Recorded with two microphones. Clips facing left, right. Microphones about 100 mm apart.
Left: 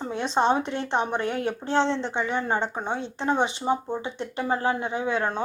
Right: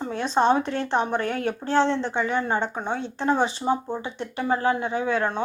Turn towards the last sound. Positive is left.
turn(degrees=25)  # may be behind; listen again after turning